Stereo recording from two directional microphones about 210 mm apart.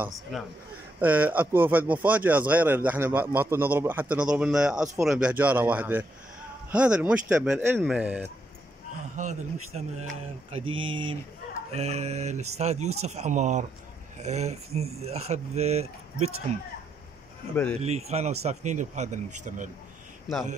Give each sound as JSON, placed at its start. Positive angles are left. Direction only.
{"t": 0.0, "sound": "speech", "side_deg": 0}
{"t": 9.1, "sound": "speech", "side_deg": -35}
{"t": 17.7, "sound": "speech", "side_deg": -30}